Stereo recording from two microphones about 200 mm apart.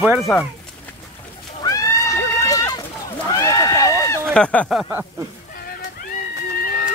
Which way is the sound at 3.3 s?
15° left (ahead or behind).